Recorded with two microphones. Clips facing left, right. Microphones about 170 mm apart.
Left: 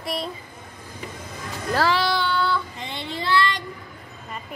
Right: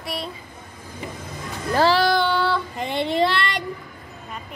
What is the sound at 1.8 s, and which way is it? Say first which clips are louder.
Child singing: right 7 dB; 45° right (ahead or behind).